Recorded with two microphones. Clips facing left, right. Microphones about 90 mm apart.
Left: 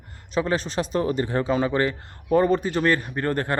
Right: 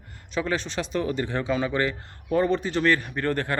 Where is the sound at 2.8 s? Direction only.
30° left (ahead or behind).